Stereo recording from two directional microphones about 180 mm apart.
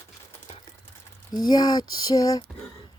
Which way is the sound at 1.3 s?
25° left (ahead or behind).